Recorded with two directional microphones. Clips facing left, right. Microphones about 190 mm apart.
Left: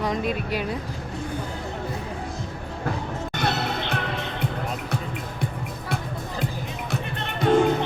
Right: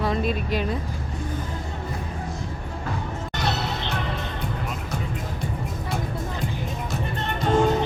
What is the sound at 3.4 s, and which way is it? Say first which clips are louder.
Music: left 1 dB; 55° left (ahead or behind).